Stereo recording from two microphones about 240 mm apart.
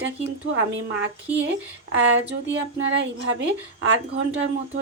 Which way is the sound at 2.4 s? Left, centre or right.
Right.